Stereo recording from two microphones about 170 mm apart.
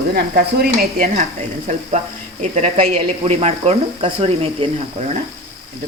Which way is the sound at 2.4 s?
40° right (ahead or behind).